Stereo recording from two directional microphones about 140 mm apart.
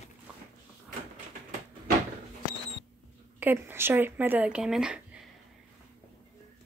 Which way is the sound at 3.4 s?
15° right (ahead or behind).